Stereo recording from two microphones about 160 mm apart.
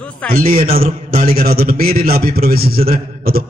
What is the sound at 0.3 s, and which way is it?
A man's voice, 60° right (ahead or behind).